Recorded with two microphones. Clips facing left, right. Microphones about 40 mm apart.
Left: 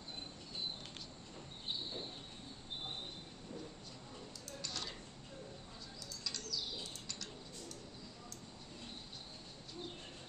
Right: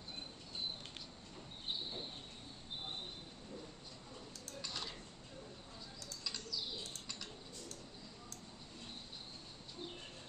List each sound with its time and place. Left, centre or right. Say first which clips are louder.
4.6 s tick-tock: even; centre
6.2 s bird flight: left 1 dB; centre